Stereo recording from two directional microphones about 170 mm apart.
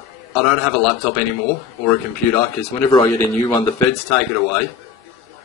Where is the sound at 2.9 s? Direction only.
20° left (ahead or behind).